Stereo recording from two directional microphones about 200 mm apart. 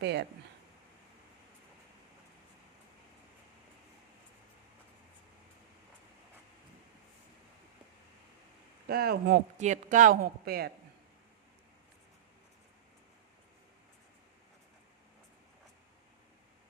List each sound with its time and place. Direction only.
0.0 s speech: 55° right (ahead or behind)
8.9 s speech: 50° right (ahead or behind)
9.6 s speech: 40° right (ahead or behind)